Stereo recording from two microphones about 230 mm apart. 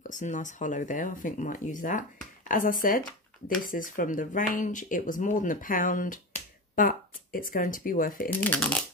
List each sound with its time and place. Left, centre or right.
0.0 s speech: left
8.3 s speech: centre